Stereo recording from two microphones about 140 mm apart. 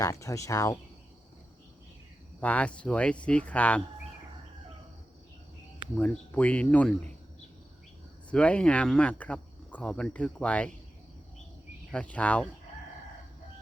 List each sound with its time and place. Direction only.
0.0 s speech: 25° left (ahead or behind)
2.4 s speech: 10° left (ahead or behind)
6.0 s speech: 10° left (ahead or behind)
8.3 s speech: 10° left (ahead or behind)
11.9 s speech: 10° left (ahead or behind)